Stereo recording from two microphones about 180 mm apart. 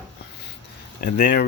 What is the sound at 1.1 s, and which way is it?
Speech, 60° left (ahead or behind).